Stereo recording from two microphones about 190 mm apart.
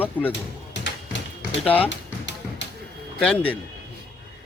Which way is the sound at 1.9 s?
75° left (ahead or behind).